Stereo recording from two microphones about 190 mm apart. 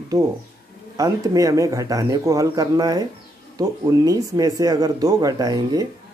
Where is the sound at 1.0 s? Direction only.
20° right (ahead or behind).